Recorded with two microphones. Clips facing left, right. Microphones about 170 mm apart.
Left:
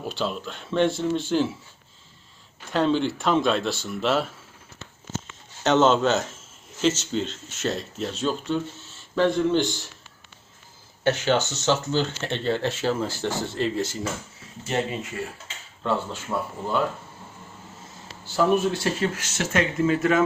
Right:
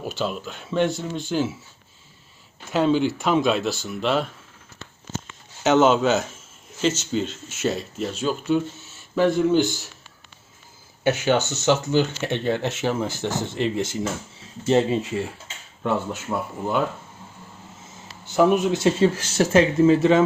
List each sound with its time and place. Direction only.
0.1 s speech: 5° right (ahead or behind)
2.6 s speech: 5° right (ahead or behind)
5.6 s speech: 5° right (ahead or behind)
11.0 s speech: 10° right (ahead or behind)
14.7 s speech: 30° right (ahead or behind)
16.3 s speech: 10° right (ahead or behind)
18.3 s speech: 15° right (ahead or behind)